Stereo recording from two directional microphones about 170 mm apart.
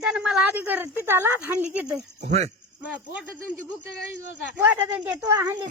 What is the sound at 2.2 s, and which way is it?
Speech, 40° right (ahead or behind).